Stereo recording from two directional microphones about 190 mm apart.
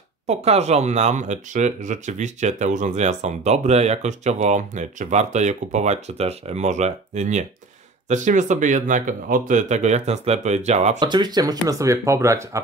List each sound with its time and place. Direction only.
0.3 s speech: 35° right (ahead or behind)
11.0 s speech: 25° right (ahead or behind)